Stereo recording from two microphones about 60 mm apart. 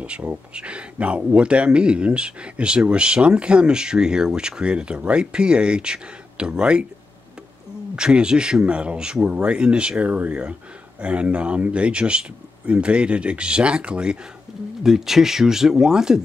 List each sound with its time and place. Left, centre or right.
0.6 s speech: centre
7.9 s speech: centre